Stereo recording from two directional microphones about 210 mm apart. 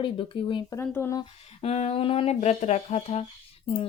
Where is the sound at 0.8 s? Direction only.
10° left (ahead or behind).